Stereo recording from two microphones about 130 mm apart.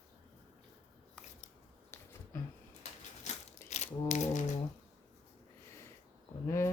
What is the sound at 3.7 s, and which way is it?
Music, 60° left (ahead or behind).